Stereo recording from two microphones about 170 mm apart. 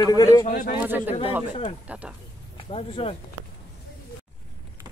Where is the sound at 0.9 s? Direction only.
10° right (ahead or behind).